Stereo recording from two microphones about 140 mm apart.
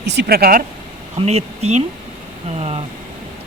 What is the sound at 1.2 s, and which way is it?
Speech, 50° right (ahead or behind).